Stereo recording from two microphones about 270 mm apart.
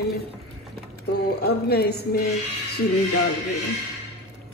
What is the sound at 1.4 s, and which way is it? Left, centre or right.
Speech, left.